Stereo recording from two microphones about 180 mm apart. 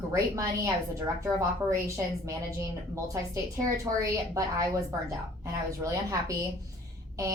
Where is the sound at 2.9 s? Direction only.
15° right (ahead or behind).